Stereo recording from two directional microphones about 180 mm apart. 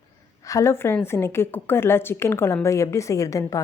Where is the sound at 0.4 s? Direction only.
15° left (ahead or behind).